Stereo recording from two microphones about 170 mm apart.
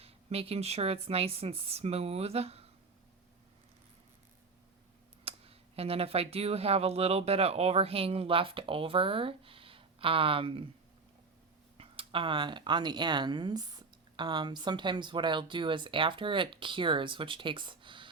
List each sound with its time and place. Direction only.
0.0 s speech: 35° right (ahead or behind)
5.2 s speech: 35° right (ahead or behind)
11.8 s speech: 30° right (ahead or behind)